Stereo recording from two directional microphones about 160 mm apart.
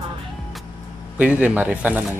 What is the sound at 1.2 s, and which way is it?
Speech, 10° right (ahead or behind).